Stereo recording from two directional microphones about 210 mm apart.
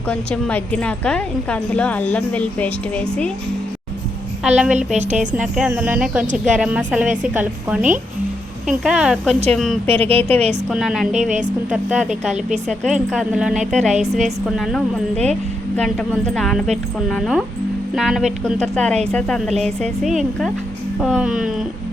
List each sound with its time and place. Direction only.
0.1 s a woman's voice: 5° left (ahead or behind)
4.4 s a woman's voice: 5° right (ahead or behind)
4.9 s speech: 35° right (ahead or behind)
5.3 s a woman's voice: 5° right (ahead or behind)
9.9 s a woman's voice: 25° right (ahead or behind)
10.7 s a woman's voice: centre (ahead or behind)
11.1 s speech: 35° right (ahead or behind)
11.7 s a woman's voice: 5° right (ahead or behind)
12.3 s speech: 35° right (ahead or behind)
13.1 s a woman's voice: centre (ahead or behind)